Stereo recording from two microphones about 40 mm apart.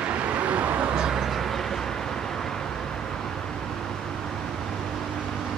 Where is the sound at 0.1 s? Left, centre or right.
Right.